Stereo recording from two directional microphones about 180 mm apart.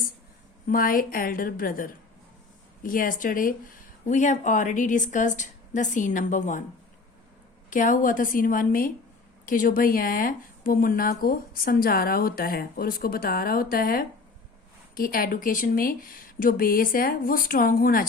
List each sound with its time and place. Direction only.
0.7 s speech: 50° left (ahead or behind)
7.7 s speech: 45° left (ahead or behind)